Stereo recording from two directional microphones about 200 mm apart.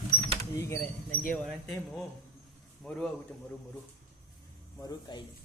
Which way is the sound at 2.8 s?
5° left (ahead or behind).